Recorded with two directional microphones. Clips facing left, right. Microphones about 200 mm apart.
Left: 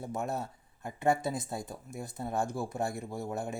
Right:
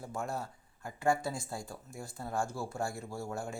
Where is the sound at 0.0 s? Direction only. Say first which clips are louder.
Left 3 dB; 20° left (ahead or behind).